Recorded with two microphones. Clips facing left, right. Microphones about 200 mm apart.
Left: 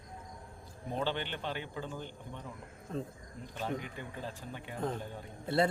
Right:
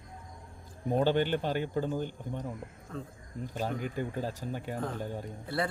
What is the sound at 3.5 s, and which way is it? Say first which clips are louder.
A man's voice: right 4 dB; 45° right (ahead or behind).